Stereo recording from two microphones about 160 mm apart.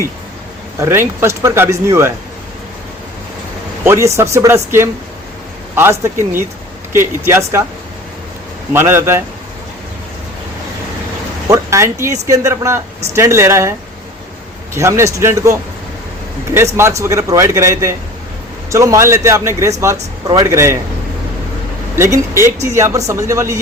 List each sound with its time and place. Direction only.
0.8 s speech: 15° right (ahead or behind)
3.8 s speech: 15° right (ahead or behind)
8.7 s speech: 15° right (ahead or behind)
11.4 s a sound: 20° right (ahead or behind)
12.2 s a man's voice: 20° right (ahead or behind)
14.8 s speech: 20° right (ahead or behind)
16.7 s a man's voice: 15° right (ahead or behind)
21.9 s speech: 15° right (ahead or behind)